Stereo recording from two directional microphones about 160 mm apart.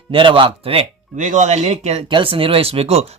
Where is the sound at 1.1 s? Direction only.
50° right (ahead or behind).